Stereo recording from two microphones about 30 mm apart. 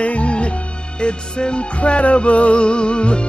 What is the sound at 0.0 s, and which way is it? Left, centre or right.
Music, left.